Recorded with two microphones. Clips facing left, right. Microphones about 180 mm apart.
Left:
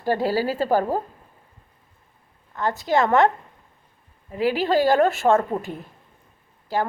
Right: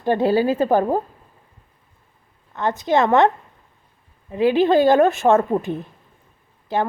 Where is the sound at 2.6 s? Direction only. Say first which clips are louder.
Right 3 dB; 20° right (ahead or behind).